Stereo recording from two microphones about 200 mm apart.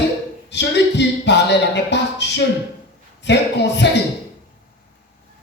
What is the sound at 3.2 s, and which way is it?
Speech, 60° left (ahead or behind).